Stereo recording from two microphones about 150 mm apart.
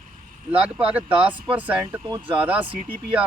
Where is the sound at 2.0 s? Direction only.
30° right (ahead or behind).